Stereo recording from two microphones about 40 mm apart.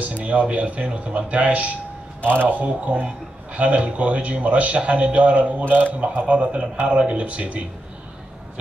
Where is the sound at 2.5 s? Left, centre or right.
Right.